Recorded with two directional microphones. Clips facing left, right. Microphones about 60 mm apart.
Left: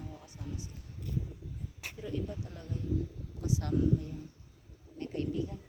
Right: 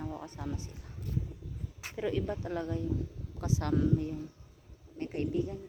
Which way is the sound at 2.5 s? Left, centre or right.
Right.